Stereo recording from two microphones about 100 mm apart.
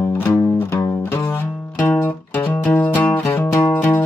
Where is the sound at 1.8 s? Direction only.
20° left (ahead or behind).